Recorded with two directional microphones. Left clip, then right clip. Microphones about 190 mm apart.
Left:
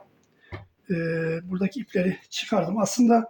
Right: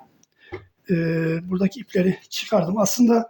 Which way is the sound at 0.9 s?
45° right (ahead or behind).